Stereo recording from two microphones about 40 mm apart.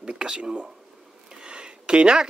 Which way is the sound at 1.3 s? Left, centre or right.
Right.